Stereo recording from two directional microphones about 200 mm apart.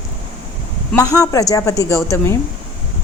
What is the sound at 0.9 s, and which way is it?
A woman's voice, 15° left (ahead or behind).